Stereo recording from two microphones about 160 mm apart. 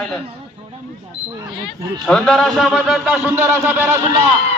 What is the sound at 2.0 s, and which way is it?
A man's voice, centre (ahead or behind).